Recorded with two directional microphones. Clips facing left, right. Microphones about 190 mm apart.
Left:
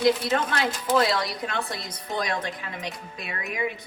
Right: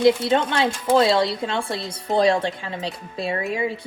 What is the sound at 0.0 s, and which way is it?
Speech, 25° right (ahead or behind).